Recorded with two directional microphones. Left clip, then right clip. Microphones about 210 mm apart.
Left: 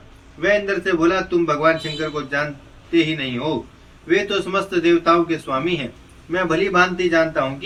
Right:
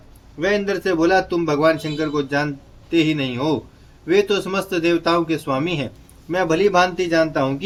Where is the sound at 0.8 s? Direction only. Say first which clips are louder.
Right 5 dB; 55° right (ahead or behind).